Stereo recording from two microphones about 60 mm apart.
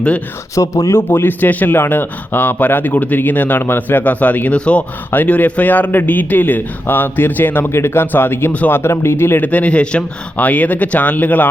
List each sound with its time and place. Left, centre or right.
0.5 s speech: left
0.9 s speech: left; by 4.9 s centre
5.1 s speech: left
7.7 s speech: left
9.4 s speech: left